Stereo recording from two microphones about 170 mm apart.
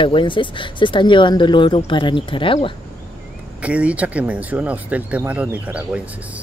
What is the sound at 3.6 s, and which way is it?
Speech, 5° right (ahead or behind).